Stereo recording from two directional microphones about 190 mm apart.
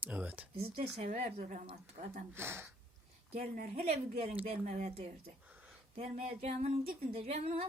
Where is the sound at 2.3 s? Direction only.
10° right (ahead or behind).